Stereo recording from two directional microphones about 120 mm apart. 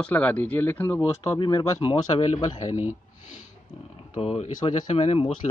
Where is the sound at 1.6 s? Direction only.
50° left (ahead or behind).